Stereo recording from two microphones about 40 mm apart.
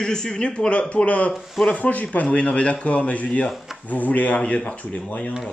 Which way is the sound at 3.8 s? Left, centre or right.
Left.